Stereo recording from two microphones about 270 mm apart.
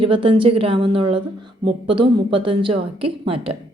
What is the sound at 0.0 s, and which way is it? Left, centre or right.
A woman's voice, centre.